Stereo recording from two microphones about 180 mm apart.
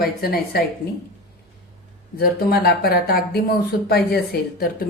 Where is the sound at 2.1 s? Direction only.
60° left (ahead or behind).